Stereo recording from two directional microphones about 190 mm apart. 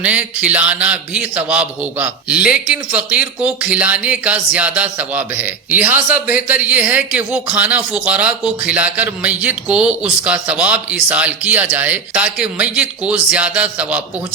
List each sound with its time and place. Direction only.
0.0 s a man's voice: 5° right (ahead or behind)